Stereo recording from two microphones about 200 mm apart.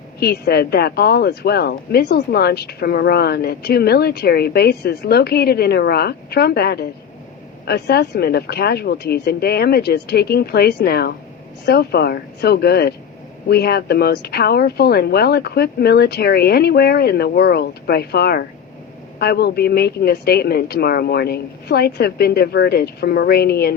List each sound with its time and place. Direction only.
0.2 s speech: 50° left (ahead or behind)